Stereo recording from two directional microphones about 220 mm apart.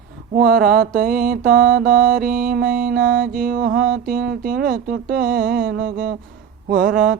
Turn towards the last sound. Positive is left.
turn(degrees=-40)  # may be behind; listen again after turning